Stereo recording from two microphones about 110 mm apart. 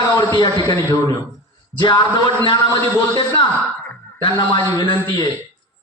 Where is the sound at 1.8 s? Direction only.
40° left (ahead or behind).